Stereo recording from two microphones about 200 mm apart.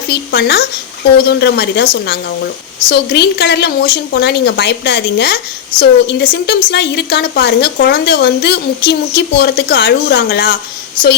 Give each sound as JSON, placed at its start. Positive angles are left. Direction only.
{"t": 0.1, "sound": "speech", "side_deg": 55}